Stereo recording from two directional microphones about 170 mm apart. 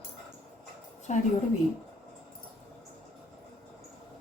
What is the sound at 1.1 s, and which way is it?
Speech, 45° left (ahead or behind).